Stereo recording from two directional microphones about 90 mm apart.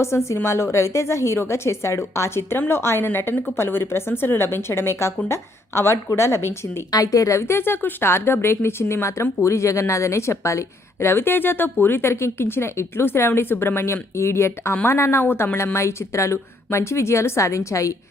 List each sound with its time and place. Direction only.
0.0 s a woman's voice: 30° left (ahead or behind)
6.9 s a woman's voice: 40° left (ahead or behind)